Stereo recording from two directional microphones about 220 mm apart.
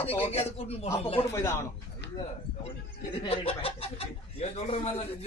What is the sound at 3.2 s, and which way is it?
Speech, 25° left (ahead or behind).